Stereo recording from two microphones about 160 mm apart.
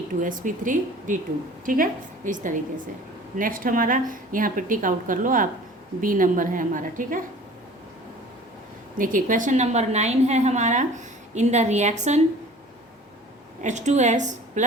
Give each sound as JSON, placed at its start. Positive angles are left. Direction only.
{"t": 0.1, "sound": "a woman's voice", "side_deg": -55}
{"t": 9.0, "sound": "a woman's voice", "side_deg": -55}
{"t": 13.6, "sound": "a woman's voice", "side_deg": -50}